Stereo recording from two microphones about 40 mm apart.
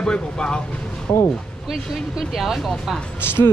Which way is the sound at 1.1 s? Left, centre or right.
Left.